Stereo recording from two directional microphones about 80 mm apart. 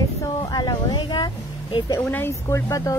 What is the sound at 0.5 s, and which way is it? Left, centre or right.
Music, left.